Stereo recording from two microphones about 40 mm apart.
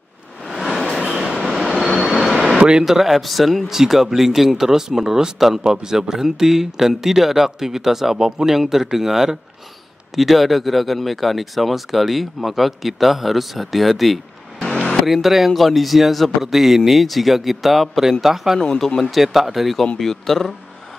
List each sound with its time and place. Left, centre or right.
0.5 s a sound: centre
1.2 s train: centre
1.7 s vehicle: centre
2.8 s speech: centre
14.6 s vehicle: left
15.0 s speech: centre
18.6 s a man's voice: centre